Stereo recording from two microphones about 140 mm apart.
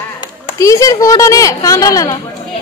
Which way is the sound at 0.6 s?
20° left (ahead or behind).